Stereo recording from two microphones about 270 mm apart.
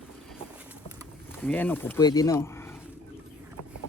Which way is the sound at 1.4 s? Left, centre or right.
Centre.